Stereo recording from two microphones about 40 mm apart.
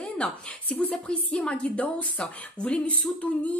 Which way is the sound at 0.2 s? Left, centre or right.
Left.